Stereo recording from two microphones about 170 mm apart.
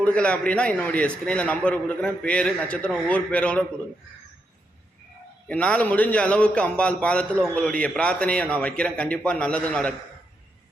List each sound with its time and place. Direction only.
0.0 s a man's voice: 5° left (ahead or behind)
5.5 s a man's voice: 5° left (ahead or behind)